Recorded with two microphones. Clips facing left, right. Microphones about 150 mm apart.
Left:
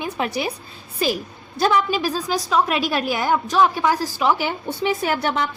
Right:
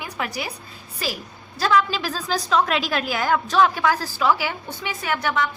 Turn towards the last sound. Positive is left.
turn(degrees=30)  # may be behind; listen again after turning